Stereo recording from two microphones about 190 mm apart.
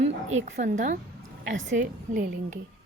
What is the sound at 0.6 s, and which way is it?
Speech, 40° right (ahead or behind).